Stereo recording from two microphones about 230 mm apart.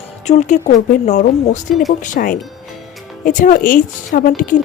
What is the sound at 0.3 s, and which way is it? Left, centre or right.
Speech, left.